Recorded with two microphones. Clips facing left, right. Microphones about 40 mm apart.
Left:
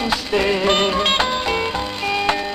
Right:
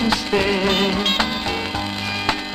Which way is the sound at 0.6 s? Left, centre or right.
Centre.